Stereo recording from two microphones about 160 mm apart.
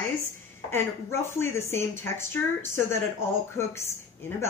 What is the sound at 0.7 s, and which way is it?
Speech, 15° left (ahead or behind).